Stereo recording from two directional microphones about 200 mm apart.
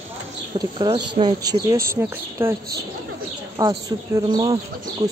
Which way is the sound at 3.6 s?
20° right (ahead or behind).